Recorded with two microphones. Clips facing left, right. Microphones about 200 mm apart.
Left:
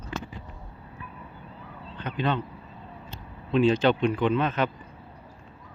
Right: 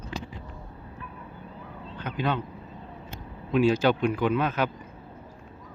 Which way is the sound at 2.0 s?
5° right (ahead or behind).